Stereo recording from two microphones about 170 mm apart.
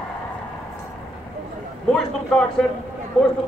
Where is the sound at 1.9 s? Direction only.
5° left (ahead or behind).